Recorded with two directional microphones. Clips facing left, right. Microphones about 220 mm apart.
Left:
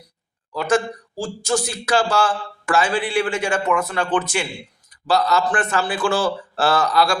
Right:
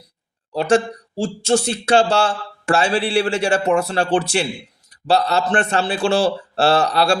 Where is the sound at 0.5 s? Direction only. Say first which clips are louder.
Right 3 dB; 30° right (ahead or behind).